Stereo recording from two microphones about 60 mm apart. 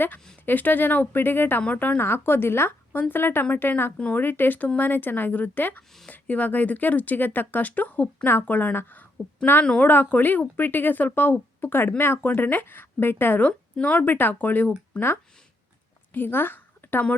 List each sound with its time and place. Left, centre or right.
0.4 s a woman's voice: left
2.0 s a woman's voice: left